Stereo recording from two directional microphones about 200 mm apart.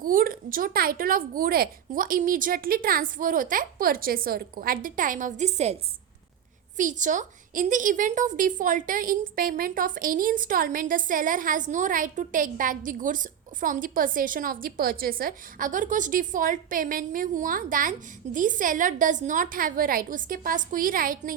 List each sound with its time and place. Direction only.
0.0 s a woman's voice: 45° right (ahead or behind)
6.7 s a woman's voice: 40° right (ahead or behind)